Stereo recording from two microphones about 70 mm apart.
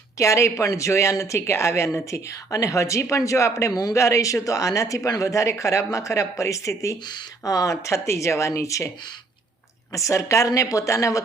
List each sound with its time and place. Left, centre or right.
0.2 s speech: left
7.0 s speech: left
9.9 s speech: left